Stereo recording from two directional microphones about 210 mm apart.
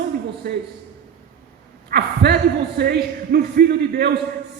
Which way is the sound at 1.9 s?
50° right (ahead or behind).